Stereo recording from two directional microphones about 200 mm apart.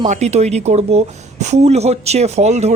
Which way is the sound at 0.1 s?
35° right (ahead or behind).